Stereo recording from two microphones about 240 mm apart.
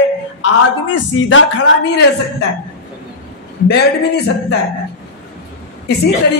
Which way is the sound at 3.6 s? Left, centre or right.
Left.